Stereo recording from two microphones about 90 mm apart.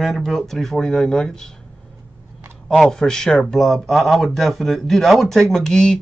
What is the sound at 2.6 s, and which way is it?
Speech, 5° left (ahead or behind).